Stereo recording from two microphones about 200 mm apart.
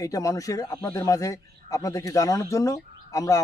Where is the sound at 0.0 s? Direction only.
15° left (ahead or behind).